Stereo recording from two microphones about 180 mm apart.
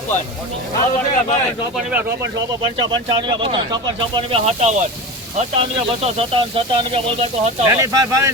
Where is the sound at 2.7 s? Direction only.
25° right (ahead or behind).